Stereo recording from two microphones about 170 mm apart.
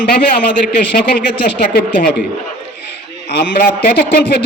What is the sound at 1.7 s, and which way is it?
Speech, 60° left (ahead or behind).